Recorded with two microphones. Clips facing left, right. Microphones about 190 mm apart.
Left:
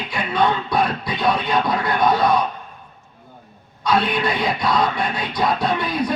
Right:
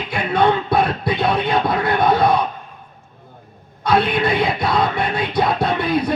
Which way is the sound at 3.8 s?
55° right (ahead or behind).